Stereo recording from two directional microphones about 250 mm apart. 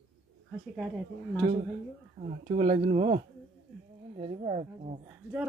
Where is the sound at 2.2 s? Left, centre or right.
Right.